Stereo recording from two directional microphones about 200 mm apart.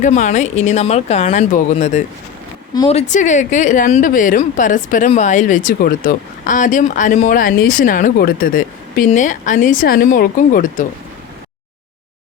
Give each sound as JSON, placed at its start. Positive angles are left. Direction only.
{"t": 0.0, "sound": "a woman's voice", "side_deg": 35}